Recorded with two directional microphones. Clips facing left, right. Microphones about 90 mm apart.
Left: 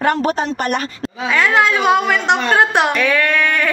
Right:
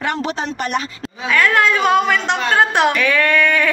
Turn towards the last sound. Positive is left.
turn(degrees=5)  # may be behind; listen again after turning